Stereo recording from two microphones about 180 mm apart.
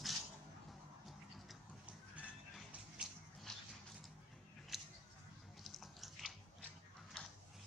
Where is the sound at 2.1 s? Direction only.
5° right (ahead or behind).